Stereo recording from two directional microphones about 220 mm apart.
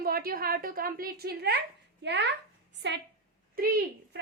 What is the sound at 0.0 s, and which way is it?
A woman's voice, 40° right (ahead or behind).